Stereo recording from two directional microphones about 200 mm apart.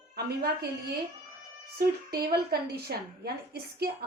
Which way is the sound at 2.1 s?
50° right (ahead or behind).